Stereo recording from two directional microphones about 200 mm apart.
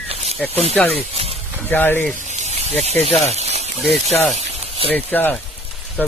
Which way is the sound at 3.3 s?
30° right (ahead or behind).